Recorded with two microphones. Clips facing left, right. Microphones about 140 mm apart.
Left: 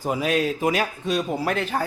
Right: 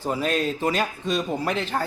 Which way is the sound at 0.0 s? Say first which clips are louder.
Left 2 dB; 10° left (ahead or behind).